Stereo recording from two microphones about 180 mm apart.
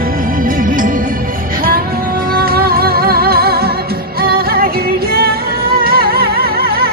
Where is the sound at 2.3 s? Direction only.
55° right (ahead or behind).